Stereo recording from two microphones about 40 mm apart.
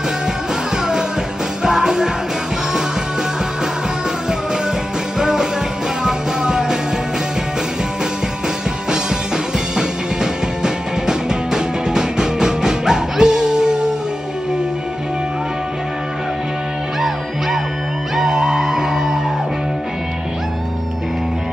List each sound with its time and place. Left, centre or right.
1.6 s music: centre
5.2 s music: centre
8.9 s music: centre
18.1 s music: centre